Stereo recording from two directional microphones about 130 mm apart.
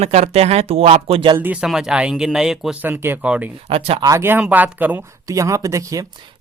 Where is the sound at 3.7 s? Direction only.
50° right (ahead or behind).